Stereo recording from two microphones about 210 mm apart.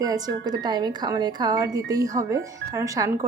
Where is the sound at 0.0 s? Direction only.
20° right (ahead or behind).